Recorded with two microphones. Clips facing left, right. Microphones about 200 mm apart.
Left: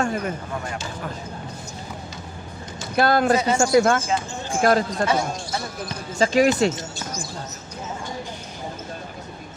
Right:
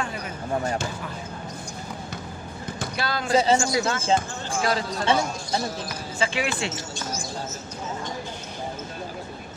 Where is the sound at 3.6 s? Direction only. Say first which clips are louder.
Left 7 dB; 55° left (ahead or behind).